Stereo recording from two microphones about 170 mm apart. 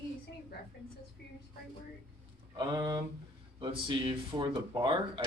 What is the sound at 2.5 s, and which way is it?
Speech, 25° right (ahead or behind).